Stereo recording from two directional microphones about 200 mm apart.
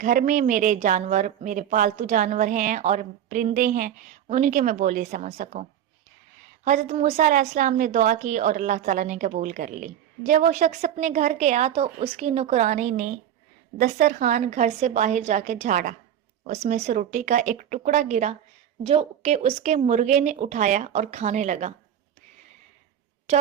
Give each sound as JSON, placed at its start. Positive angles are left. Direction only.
{"t": 0.0, "sound": "a woman's voice", "side_deg": -40}
{"t": 6.7, "sound": "a woman's voice", "side_deg": -35}